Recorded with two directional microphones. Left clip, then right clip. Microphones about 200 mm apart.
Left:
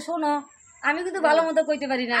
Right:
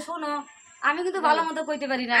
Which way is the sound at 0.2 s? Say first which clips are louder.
Left 5 dB; 20° right (ahead or behind).